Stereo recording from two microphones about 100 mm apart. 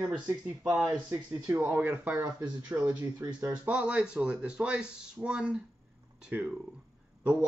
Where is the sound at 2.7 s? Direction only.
20° right (ahead or behind).